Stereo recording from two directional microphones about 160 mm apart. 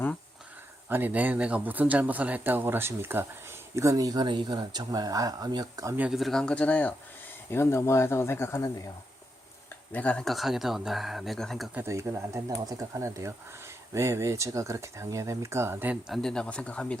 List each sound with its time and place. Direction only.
0.9 s speech: 10° right (ahead or behind)
6.0 s speech: centre (ahead or behind); by 8.7 s 15° left (ahead or behind)
9.9 s speech: 10° left (ahead or behind)
11.7 s speech: 15° right (ahead or behind); by 17.0 s 5° left (ahead or behind)